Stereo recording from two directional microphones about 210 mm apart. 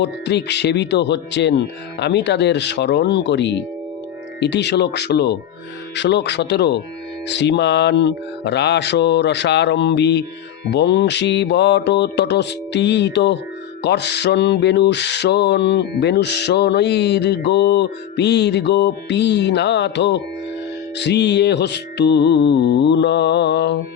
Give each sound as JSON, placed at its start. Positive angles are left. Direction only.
{"t": 0.0, "sound": "speech", "side_deg": 55}
{"t": 4.4, "sound": "mantra", "side_deg": 55}
{"t": 7.3, "sound": "speech", "side_deg": 55}
{"t": 13.8, "sound": "mantra", "side_deg": 55}
{"t": 21.0, "sound": "speech", "side_deg": 55}